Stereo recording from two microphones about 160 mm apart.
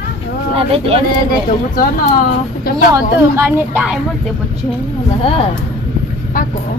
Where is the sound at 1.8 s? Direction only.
60° left (ahead or behind).